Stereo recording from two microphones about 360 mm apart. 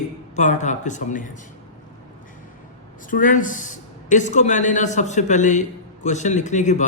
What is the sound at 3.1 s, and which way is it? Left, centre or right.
A man's voice, left.